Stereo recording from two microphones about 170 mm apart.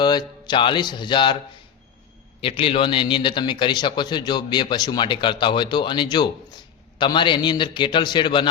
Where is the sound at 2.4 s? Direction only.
35° left (ahead or behind).